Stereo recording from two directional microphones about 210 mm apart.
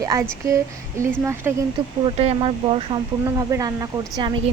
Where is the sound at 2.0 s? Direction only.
30° right (ahead or behind).